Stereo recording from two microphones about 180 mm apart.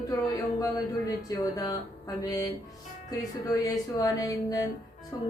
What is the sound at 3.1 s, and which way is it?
Speech, 20° left (ahead or behind).